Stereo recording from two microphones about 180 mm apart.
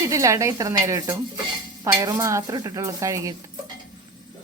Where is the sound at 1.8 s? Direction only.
20° right (ahead or behind).